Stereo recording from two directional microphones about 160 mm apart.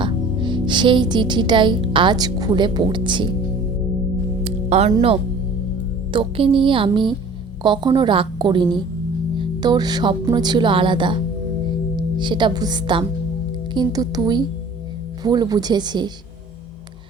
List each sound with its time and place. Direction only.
0.0 s a woman's voice: 30° right (ahead or behind)
4.4 s music: 40° right (ahead or behind)
4.9 s a woman's voice: 35° right (ahead or behind)